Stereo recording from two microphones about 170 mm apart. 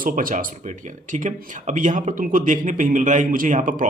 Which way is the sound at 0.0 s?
55° right (ahead or behind).